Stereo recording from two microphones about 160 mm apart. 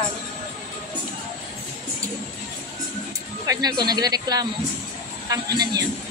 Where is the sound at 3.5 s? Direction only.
25° right (ahead or behind).